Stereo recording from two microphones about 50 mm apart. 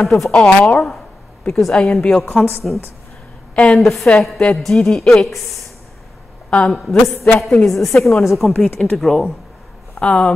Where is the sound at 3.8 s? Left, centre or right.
Centre.